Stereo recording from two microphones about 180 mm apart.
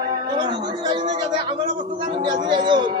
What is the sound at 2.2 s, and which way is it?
Speech, 25° right (ahead or behind).